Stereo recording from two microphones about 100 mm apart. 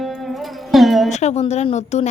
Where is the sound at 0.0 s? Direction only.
Centre (ahead or behind).